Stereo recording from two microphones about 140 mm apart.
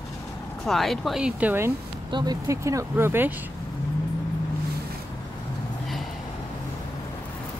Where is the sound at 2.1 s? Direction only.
30° right (ahead or behind).